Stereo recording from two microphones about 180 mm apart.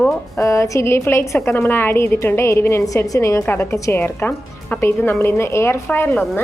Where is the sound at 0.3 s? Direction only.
15° left (ahead or behind).